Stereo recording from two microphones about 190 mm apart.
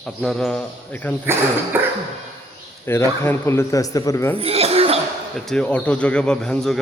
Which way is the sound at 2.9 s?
10° left (ahead or behind).